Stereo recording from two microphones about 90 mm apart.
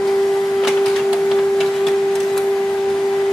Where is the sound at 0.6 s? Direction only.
Centre (ahead or behind).